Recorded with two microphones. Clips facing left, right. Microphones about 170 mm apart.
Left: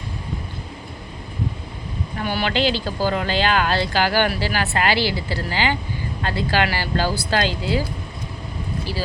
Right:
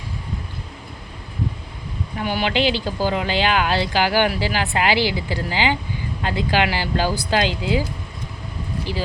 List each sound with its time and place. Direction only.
2.1 s speech: 15° right (ahead or behind)